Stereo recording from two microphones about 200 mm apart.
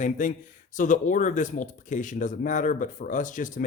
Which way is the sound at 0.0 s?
40° left (ahead or behind).